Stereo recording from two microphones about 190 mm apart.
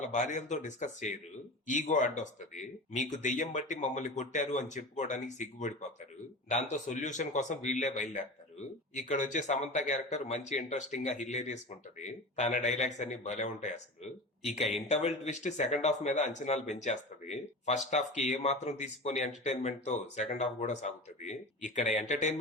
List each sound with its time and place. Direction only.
0.1 s speech: 40° left (ahead or behind)